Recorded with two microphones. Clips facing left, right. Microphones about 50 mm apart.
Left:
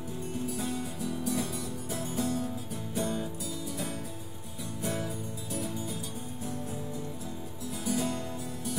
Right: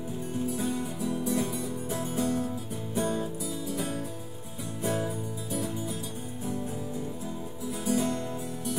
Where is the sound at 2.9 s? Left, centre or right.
Right.